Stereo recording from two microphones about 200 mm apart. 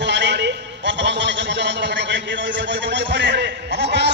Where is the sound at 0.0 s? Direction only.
60° right (ahead or behind).